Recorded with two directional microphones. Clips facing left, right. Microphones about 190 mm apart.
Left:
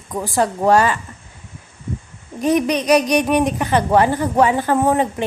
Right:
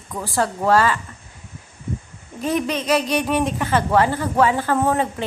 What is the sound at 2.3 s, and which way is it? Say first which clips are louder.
A woman's voice: left 5 dB; 15° left (ahead or behind).